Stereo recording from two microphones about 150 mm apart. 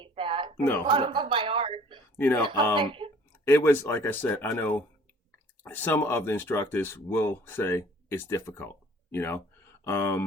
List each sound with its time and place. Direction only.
0.0 s a sound: 35° right (ahead or behind)
0.5 s speech: 15° left (ahead or behind)
0.9 s a sound: 35° right (ahead or behind)
2.1 s speech: 10° left (ahead or behind)
2.8 s speech: 35° right (ahead or behind)
3.4 s speech: 15° left (ahead or behind)